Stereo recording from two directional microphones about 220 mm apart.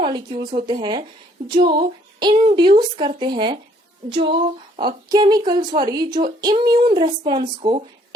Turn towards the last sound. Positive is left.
turn(degrees=-25)  # may be behind; listen again after turning